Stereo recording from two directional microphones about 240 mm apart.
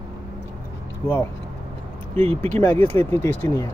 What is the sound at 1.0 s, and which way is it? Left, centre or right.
Speech, centre.